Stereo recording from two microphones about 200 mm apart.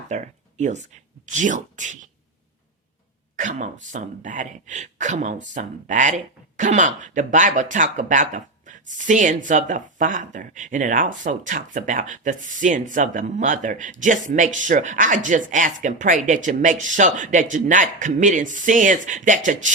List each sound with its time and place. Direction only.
0.1 s speech: 35° right (ahead or behind)
3.3 s speech: 40° right (ahead or behind)